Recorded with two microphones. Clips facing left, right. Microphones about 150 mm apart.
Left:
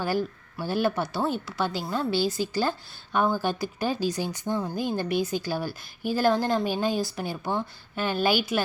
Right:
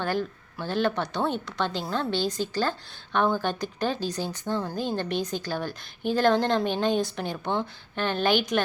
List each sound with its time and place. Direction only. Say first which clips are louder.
0.0 s a woman's voice: left 1 dB; 5° left (ahead or behind)